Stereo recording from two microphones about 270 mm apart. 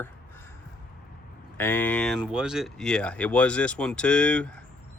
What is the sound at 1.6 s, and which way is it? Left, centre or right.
Speech, centre.